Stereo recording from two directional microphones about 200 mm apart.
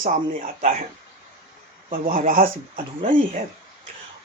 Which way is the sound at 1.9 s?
45° right (ahead or behind).